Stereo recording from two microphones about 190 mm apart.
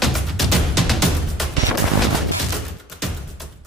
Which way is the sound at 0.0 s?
Centre (ahead or behind).